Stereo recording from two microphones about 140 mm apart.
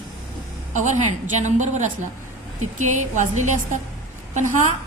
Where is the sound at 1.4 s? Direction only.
60° right (ahead or behind).